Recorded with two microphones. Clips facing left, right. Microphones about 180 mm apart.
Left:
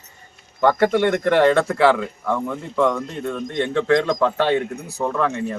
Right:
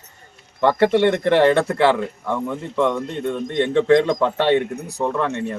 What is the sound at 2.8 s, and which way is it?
A man's voice, 25° right (ahead or behind).